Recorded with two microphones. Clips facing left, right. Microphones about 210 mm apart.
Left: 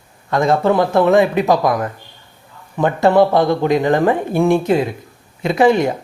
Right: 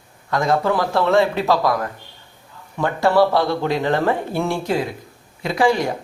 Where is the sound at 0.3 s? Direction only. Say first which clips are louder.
Left 4 dB; 25° left (ahead or behind).